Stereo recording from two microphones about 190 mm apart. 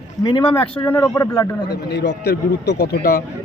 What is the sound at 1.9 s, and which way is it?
A man's voice, 65° left (ahead or behind).